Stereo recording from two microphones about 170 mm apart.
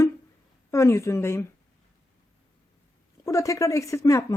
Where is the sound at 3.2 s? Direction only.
20° left (ahead or behind).